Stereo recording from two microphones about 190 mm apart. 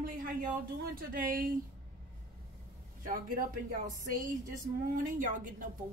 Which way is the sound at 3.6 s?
45° right (ahead or behind).